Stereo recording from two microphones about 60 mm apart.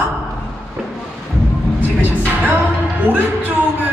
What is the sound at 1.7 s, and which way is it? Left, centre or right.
Music, right.